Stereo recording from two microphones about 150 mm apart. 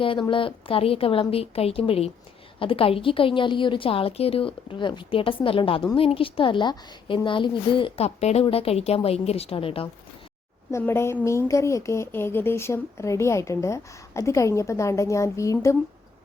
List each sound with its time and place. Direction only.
0.0 s a woman's voice: 35° left (ahead or behind)
10.7 s speech: 15° left (ahead or behind)